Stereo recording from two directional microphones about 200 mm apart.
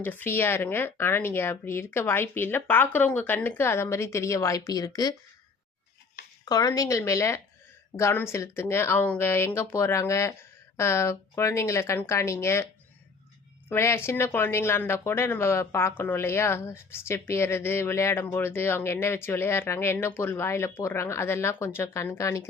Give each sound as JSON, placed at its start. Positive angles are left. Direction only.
{"t": 0.0, "sound": "a woman's voice", "side_deg": 10}
{"t": 6.4, "sound": "a woman's voice", "side_deg": 20}
{"t": 13.7, "sound": "a woman's voice", "side_deg": 10}